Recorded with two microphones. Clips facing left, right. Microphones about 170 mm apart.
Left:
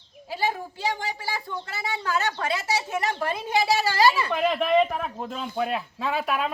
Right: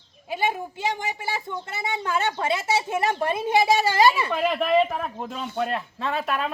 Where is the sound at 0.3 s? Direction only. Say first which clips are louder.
Right 2 dB; 20° right (ahead or behind).